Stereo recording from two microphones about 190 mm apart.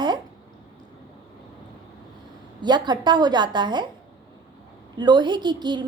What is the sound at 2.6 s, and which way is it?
A woman's voice, 25° right (ahead or behind).